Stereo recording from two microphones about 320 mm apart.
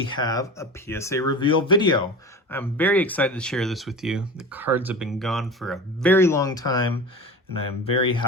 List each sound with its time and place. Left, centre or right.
0.1 s speech: centre
7.9 s speech: centre